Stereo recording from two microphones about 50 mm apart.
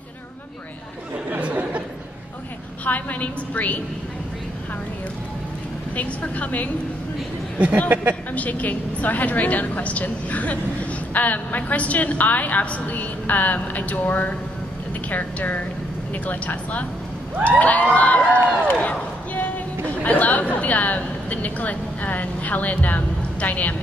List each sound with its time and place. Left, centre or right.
1.4 s a sound: right
2.8 s a woman's voice: left
5.9 s a woman's voice: left
7.5 s speech: right
8.3 s a woman's voice: left
17.4 s a sound: left
20.0 s a woman's voice: left